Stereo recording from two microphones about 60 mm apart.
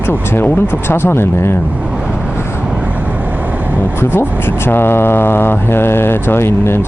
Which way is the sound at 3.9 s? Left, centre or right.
Left.